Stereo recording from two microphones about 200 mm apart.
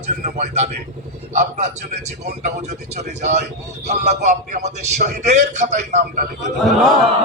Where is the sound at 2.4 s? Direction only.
35° right (ahead or behind).